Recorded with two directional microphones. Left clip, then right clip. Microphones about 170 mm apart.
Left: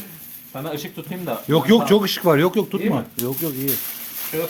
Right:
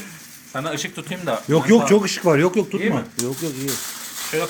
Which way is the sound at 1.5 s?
Centre (ahead or behind).